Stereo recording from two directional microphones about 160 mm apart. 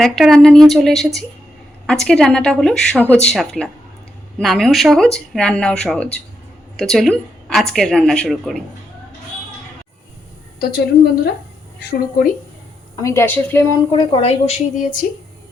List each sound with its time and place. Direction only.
0.0 s speech: centre (ahead or behind)
10.6 s a woman's voice: 75° left (ahead or behind)
13.0 s a woman's voice: 15° left (ahead or behind)
13.9 s a woman's voice: 35° left (ahead or behind)